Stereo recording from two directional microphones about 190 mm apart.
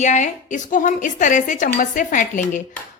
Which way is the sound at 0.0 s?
40° left (ahead or behind).